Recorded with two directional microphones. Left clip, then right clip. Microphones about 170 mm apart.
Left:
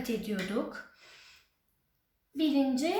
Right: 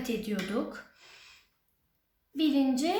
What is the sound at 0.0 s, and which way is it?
Speech, 10° right (ahead or behind).